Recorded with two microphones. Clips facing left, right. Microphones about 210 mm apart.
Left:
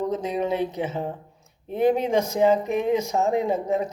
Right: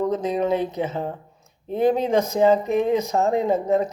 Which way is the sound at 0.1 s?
10° left (ahead or behind).